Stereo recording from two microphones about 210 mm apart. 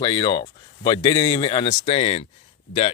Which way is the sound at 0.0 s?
20° left (ahead or behind).